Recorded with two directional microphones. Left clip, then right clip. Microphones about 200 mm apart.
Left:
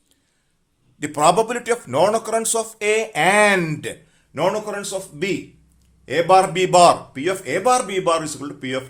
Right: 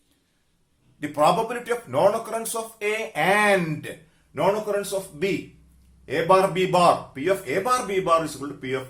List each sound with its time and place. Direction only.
0.9 s speech: 50° left (ahead or behind)